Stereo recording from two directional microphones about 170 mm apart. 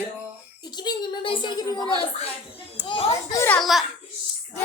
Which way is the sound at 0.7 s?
25° left (ahead or behind).